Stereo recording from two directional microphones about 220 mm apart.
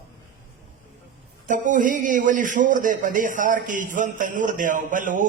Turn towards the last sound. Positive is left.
turn(degrees=-35)  # may be behind; listen again after turning